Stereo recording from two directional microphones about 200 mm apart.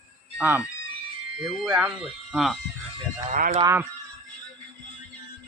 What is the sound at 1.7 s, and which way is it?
Speech, 5° right (ahead or behind).